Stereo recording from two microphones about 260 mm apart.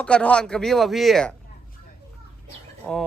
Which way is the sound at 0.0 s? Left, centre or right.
Centre.